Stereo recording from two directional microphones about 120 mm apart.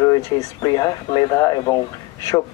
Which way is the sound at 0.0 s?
30° left (ahead or behind).